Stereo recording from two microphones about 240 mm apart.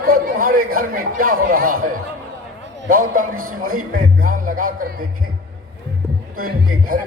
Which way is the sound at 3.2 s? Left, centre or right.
Right.